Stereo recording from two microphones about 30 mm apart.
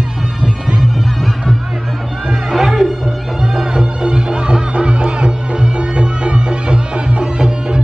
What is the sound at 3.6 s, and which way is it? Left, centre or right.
Music, right.